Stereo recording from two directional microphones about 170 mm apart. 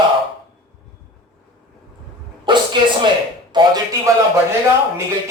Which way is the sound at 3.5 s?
25° right (ahead or behind).